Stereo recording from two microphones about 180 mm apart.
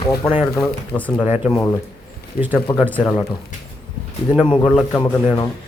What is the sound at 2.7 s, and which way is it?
Speech, 20° left (ahead or behind).